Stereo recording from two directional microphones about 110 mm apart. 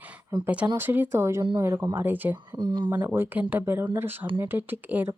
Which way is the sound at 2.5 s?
40° right (ahead or behind).